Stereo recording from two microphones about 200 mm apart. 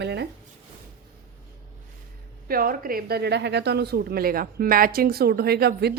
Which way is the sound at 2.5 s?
45° right (ahead or behind).